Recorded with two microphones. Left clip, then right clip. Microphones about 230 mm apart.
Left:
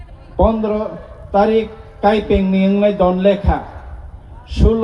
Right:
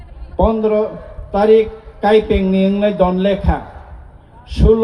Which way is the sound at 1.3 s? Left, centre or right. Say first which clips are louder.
Right 3 dB; right.